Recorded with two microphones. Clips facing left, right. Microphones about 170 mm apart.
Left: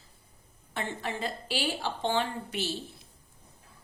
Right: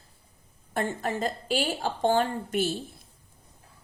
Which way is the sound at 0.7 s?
45° right (ahead or behind).